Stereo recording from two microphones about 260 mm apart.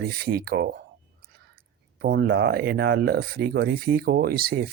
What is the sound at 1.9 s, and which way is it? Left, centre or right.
Speech, right.